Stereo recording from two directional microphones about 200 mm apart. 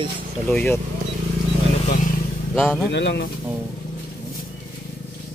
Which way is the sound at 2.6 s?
Centre (ahead or behind).